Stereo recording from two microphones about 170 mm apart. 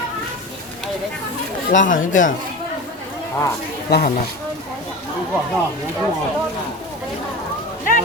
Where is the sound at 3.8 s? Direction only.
70° left (ahead or behind).